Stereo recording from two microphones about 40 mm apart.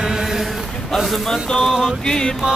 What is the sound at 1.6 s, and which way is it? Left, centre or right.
Music, centre.